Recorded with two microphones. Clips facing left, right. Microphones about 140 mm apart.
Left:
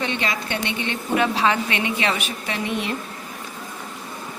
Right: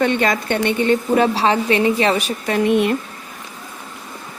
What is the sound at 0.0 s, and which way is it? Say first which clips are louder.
A woman's voice: right 8 dB; 50° right (ahead or behind).